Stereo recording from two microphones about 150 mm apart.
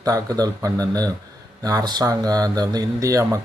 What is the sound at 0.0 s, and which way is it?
Speech, 25° right (ahead or behind).